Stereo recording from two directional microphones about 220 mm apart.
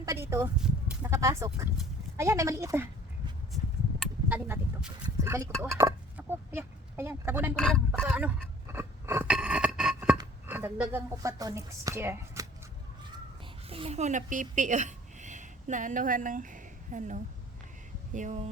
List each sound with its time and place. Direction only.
0.0 s speech: 10° right (ahead or behind)
4.3 s a sound: 10° right (ahead or behind)
7.5 s speech: centre (ahead or behind)
8.6 s a sound: 10° right (ahead or behind)
10.2 s speech: 10° right (ahead or behind)
13.7 s speech: 25° right (ahead or behind)